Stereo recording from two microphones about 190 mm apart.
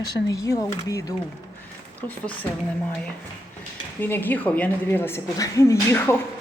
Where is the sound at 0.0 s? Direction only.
20° left (ahead or behind).